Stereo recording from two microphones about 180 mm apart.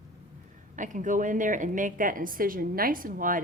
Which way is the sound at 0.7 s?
45° right (ahead or behind).